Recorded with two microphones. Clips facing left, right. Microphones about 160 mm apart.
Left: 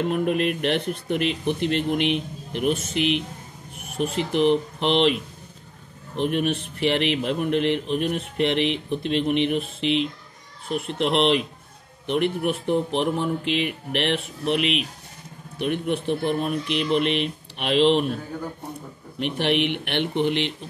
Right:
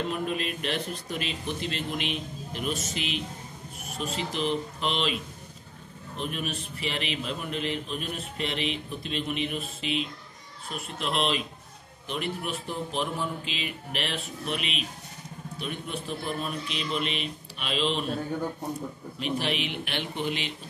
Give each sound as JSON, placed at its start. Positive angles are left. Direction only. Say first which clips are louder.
{"t": 0.1, "sound": "speech", "louder": "left 8 dB", "side_deg": 60}
{"t": 19.1, "sound": "speech", "louder": "left 7 dB", "side_deg": 65}